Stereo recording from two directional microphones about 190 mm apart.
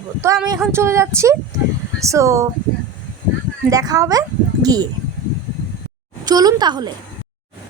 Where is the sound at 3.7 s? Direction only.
20° right (ahead or behind).